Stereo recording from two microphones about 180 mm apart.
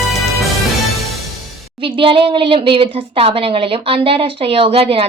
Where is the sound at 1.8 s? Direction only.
30° right (ahead or behind).